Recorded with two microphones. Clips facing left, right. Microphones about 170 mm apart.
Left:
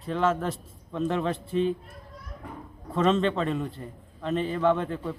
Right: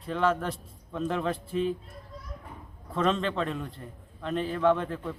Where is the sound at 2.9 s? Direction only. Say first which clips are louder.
Left 4 dB; centre (ahead or behind).